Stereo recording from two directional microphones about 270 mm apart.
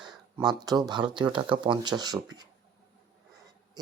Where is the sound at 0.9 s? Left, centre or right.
Centre.